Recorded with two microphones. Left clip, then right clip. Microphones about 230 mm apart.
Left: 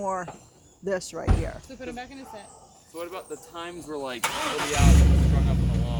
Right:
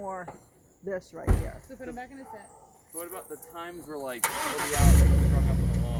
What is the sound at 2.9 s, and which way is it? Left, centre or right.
Speech, centre.